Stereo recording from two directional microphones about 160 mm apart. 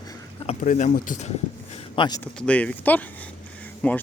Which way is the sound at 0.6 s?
50° left (ahead or behind).